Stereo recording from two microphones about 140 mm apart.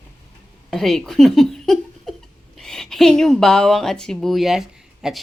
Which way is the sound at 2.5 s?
5° left (ahead or behind).